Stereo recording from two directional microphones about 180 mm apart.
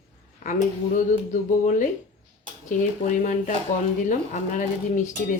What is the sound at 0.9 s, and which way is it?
Speech, 45° left (ahead or behind).